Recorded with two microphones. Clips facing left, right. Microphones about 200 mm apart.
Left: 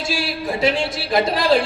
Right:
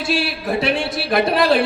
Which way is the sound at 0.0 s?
60° right (ahead or behind).